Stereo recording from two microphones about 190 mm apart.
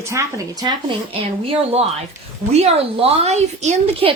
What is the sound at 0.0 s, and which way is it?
A woman's voice, 15° right (ahead or behind).